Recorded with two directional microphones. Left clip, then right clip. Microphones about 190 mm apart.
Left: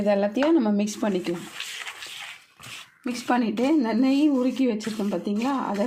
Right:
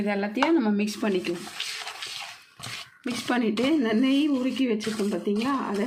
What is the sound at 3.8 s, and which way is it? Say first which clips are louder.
Speech: left 2 dB; 35° left (ahead or behind).